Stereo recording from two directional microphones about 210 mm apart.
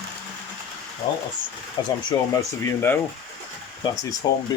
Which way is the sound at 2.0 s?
15° left (ahead or behind).